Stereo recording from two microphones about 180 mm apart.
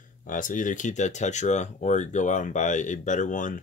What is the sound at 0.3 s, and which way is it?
Speech, 45° left (ahead or behind).